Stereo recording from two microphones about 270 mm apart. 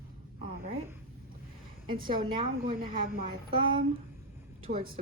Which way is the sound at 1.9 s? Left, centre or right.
Centre.